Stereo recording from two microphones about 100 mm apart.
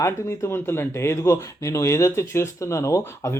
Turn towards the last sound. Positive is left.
turn(degrees=25)  # may be behind; listen again after turning